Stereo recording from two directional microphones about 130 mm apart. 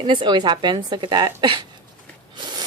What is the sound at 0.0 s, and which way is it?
Speech, 35° right (ahead or behind).